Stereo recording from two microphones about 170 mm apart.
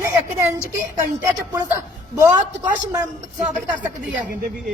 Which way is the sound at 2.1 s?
15° right (ahead or behind).